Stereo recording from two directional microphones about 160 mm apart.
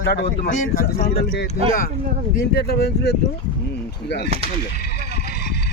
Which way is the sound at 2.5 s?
85° left.